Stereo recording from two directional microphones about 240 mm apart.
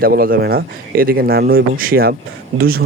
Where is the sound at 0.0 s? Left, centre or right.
Right.